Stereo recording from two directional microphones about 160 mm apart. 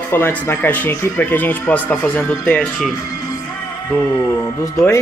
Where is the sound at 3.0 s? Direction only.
25° left (ahead or behind).